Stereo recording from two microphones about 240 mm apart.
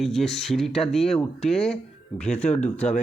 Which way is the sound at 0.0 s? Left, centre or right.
Centre.